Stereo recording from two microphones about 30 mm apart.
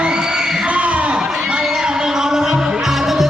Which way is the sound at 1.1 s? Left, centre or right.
Right.